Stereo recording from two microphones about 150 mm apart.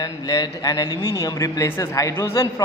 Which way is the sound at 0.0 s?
25° left (ahead or behind).